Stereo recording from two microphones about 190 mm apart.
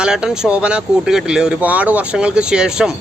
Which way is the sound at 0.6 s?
5° right (ahead or behind).